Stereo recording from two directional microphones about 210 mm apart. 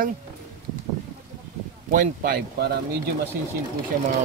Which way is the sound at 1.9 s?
45° right (ahead or behind).